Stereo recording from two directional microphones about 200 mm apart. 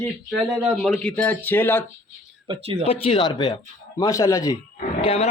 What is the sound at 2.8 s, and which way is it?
A man's voice, 30° left (ahead or behind).